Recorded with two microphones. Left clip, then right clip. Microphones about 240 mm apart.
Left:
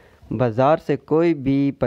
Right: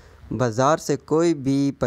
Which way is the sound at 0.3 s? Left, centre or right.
Left.